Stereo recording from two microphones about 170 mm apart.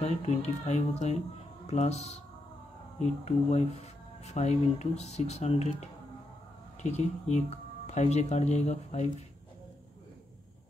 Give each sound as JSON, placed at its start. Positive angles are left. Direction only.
{"t": 0.0, "sound": "speech", "side_deg": 40}
{"t": 7.0, "sound": "speech", "side_deg": 40}